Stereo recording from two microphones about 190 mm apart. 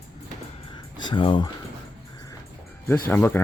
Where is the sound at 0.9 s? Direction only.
25° left (ahead or behind).